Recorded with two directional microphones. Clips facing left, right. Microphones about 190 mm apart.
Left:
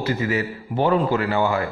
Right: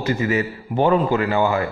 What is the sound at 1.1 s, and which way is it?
Speech, 15° right (ahead or behind).